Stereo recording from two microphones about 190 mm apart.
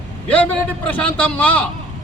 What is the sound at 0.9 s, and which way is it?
Speech, 5° left (ahead or behind).